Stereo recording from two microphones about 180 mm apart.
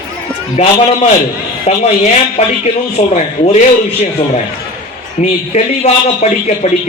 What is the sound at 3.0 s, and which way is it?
Speech, 35° left (ahead or behind).